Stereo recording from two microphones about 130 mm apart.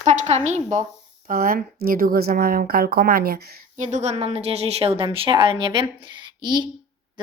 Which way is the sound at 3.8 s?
65° right (ahead or behind).